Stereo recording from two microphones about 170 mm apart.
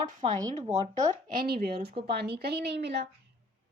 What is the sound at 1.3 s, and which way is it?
A woman's voice, 65° right (ahead or behind).